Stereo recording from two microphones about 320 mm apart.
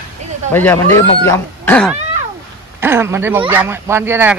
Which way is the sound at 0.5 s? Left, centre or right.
Centre.